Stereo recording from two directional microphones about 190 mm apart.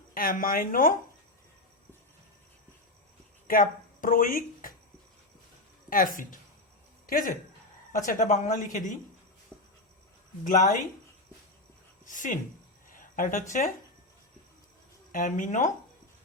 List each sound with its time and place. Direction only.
0.1 s a woman's voice: 50° left (ahead or behind)
3.4 s speech: 45° left (ahead or behind)
5.9 s a woman's voice: 45° left (ahead or behind)
9.5 s writing: 5° left (ahead or behind)
10.4 s a woman's voice: 45° left (ahead or behind)
12.0 s a woman's voice: 45° left (ahead or behind)
12.9 s a sound: 45° left (ahead or behind)
15.1 s a woman's voice: 45° left (ahead or behind)